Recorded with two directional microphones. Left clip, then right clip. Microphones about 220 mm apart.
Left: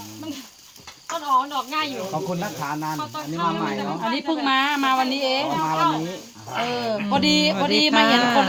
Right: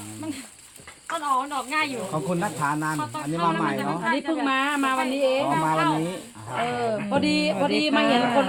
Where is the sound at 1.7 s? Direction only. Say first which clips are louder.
Even; centre (ahead or behind).